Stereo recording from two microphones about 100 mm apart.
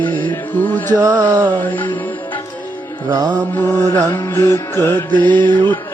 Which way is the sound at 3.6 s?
30° left (ahead or behind).